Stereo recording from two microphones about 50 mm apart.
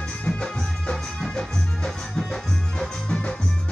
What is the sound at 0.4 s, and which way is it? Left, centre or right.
Music, centre.